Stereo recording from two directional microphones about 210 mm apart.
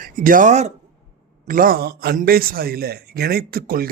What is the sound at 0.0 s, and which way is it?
A man's voice, 40° right (ahead or behind).